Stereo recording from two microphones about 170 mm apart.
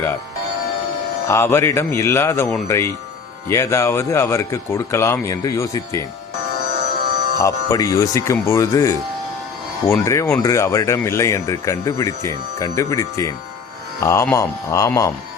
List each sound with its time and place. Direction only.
1.3 s speech: 15° left (ahead or behind)
7.3 s speech: 20° left (ahead or behind)